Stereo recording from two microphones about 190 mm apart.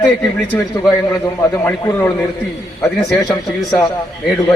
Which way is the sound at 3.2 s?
20° left (ahead or behind).